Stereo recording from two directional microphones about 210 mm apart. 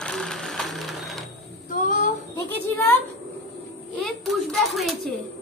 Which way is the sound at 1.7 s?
40° left (ahead or behind).